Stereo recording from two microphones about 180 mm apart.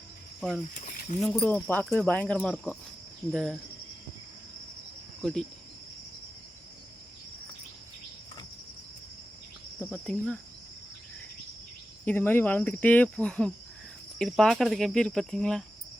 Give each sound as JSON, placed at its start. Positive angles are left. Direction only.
{"t": 0.3, "sound": "cricket", "side_deg": 0}
{"t": 0.7, "sound": "snake", "side_deg": 45}
{"t": 1.2, "sound": "speech", "side_deg": 5}
{"t": 5.2, "sound": "speech", "side_deg": 0}
{"t": 9.8, "sound": "speech", "side_deg": 5}
{"t": 12.0, "sound": "speech", "side_deg": 10}